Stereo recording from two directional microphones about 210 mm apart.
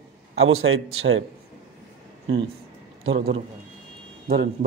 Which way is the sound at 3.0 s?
60° right (ahead or behind).